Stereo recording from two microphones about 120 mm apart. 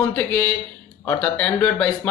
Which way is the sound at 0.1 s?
15° left (ahead or behind).